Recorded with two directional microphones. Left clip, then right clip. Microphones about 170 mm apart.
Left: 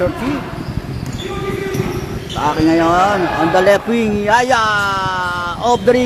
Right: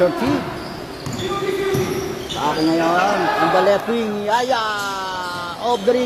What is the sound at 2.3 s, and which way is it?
Speech, 30° left (ahead or behind).